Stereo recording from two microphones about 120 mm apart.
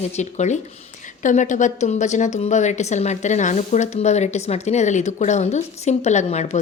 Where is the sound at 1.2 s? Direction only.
90° left.